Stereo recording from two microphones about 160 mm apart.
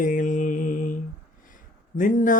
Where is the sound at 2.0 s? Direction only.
55° left (ahead or behind).